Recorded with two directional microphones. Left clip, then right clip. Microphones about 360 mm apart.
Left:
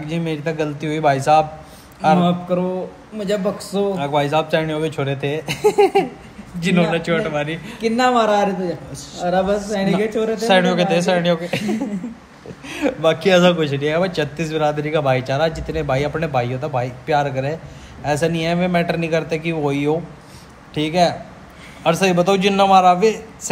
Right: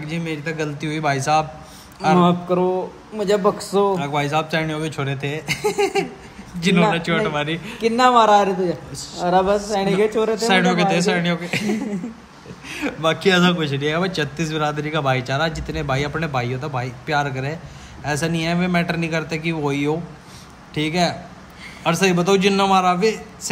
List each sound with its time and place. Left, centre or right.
0.0 s a man's voice: centre
2.1 s speech: centre
3.9 s a man's voice: centre
6.9 s a man's voice: centre
10.3 s a man's voice: centre
12.6 s a man's voice: centre